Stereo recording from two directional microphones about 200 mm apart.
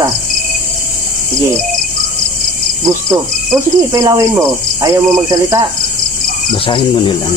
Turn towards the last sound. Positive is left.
turn(degrees=25)  # may be behind; listen again after turning